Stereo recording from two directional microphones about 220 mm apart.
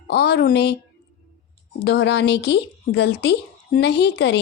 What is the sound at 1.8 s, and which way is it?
A woman's voice, 50° left (ahead or behind).